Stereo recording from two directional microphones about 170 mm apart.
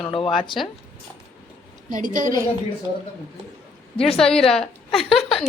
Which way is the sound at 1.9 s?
50° right (ahead or behind).